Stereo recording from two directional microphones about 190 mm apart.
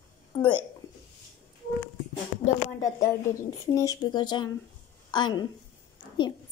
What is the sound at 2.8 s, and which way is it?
A woman's voice, 15° left (ahead or behind).